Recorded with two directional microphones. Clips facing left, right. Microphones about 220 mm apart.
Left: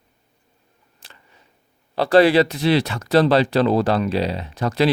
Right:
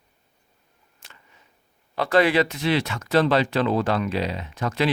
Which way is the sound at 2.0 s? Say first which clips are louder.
Left 5 dB; 35° left (ahead or behind).